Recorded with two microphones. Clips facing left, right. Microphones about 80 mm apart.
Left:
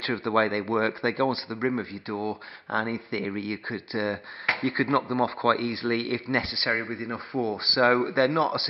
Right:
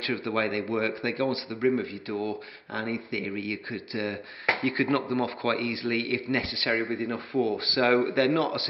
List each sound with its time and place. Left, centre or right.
0.0 s speech: left
1.3 s speech: left
6.3 s speech: left